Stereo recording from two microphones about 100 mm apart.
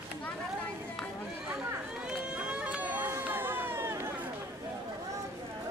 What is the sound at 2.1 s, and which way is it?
Run, 10° right (ahead or behind).